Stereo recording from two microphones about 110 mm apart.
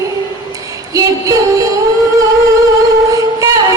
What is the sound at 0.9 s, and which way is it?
Music, 30° right (ahead or behind).